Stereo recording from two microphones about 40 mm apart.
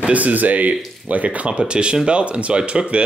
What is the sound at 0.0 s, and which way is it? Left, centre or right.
Speech, right.